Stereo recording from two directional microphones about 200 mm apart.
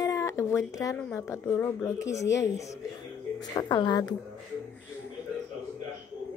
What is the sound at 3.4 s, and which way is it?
Speech, 20° left (ahead or behind).